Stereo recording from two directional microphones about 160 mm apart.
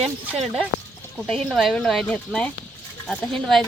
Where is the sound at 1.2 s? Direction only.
5° left (ahead or behind).